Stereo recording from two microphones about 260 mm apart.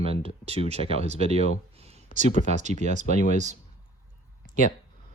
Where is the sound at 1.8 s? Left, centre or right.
Right.